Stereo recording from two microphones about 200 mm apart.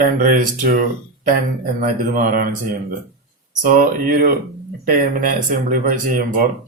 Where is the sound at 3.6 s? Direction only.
40° right (ahead or behind).